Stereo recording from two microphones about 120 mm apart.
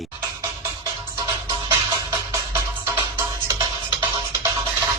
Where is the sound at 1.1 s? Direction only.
30° right (ahead or behind).